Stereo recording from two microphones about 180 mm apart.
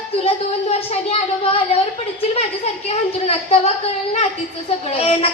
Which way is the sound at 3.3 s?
35° left (ahead or behind).